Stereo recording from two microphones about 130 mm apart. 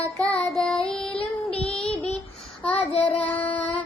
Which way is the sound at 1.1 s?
45° left (ahead or behind).